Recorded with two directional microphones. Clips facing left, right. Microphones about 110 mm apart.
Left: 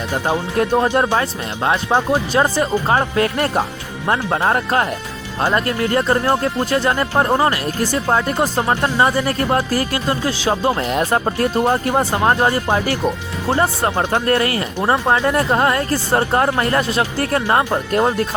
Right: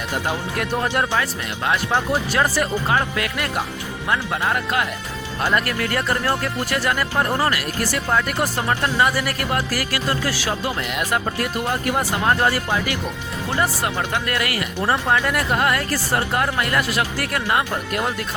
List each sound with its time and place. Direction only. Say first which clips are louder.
0.5 s speech: left 10 dB; 30° left (ahead or behind)
0.9 s speech: left 5 dB; 15° left (ahead or behind)
3.2 s speech: left 7 dB; 35° left (ahead or behind)
5.5 s speech: left 6 dB; 25° left (ahead or behind)
10.5 s speech: left 7 dB; 35° left (ahead or behind); by 12.6 s 20° left (ahead or behind)
12.6 s speech: left 6 dB; 45° left (ahead or behind)
14.3 s speech: left 7 dB; 30° left (ahead or behind)
14.8 s speech: left 3 dB; 20° left (ahead or behind); by 18.3 s 35° left (ahead or behind)